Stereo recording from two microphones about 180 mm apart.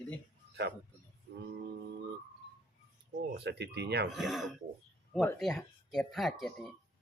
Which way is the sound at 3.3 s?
70° right (ahead or behind).